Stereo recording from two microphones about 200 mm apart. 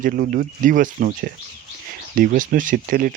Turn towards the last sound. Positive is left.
turn(degrees=-45)  # may be behind; listen again after turning